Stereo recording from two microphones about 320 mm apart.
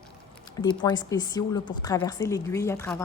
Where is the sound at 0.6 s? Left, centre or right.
Centre.